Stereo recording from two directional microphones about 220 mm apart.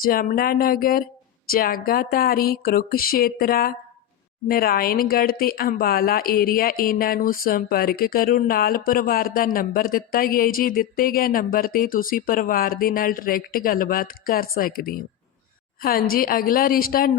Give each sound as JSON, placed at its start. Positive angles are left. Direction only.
{"t": 0.0, "sound": "speech", "side_deg": 40}
{"t": 1.5, "sound": "a sound", "side_deg": 40}
{"t": 4.4, "sound": "speech", "side_deg": 45}